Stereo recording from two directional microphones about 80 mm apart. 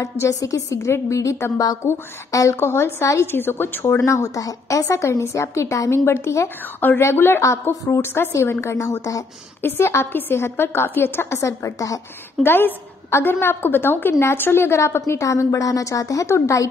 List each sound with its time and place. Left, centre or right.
0.0 s a woman's voice: left
2.3 s a woman's voice: left
3.8 s a woman's voice: left
9.6 s a woman's voice: left
12.4 s a woman's voice: left